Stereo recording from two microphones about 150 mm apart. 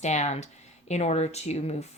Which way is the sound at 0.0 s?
50° left (ahead or behind).